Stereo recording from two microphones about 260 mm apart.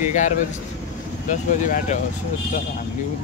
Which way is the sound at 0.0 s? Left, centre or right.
Left.